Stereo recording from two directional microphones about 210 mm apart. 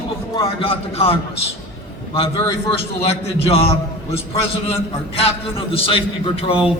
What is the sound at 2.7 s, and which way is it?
A man's voice, 30° left (ahead or behind).